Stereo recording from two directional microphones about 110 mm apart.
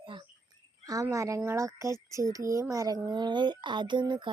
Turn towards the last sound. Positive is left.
turn(degrees=-45)  # may be behind; listen again after turning